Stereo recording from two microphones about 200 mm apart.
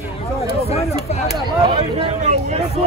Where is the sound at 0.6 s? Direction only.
30° left (ahead or behind).